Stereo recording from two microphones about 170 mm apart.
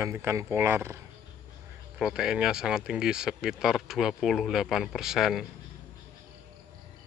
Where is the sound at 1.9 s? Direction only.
5° right (ahead or behind).